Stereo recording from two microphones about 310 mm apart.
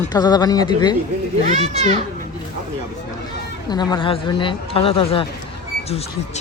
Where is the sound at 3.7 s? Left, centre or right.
Centre.